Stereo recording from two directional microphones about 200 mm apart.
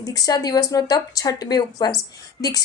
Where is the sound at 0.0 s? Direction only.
20° left (ahead or behind).